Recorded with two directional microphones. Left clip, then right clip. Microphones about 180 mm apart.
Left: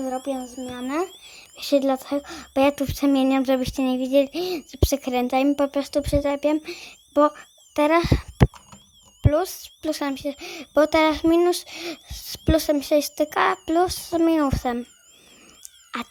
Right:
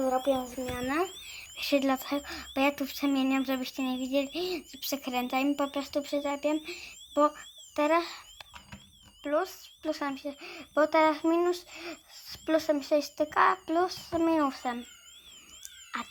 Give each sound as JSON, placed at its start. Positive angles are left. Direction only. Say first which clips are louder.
{"t": 0.0, "sound": "speech", "louder": "even", "side_deg": 60}
{"t": 1.2, "sound": "speech", "louder": "left 1 dB", "side_deg": 45}
{"t": 15.9, "sound": "speech", "louder": "left 5 dB", "side_deg": 50}